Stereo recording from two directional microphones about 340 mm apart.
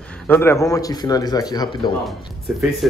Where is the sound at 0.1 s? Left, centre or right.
Centre.